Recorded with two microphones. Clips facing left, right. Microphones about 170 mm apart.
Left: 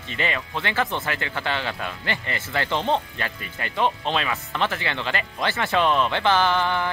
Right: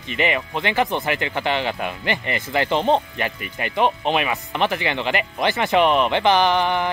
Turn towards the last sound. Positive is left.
turn(degrees=-15)  # may be behind; listen again after turning